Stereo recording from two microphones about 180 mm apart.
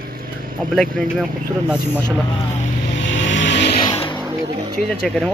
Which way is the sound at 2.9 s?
90° left.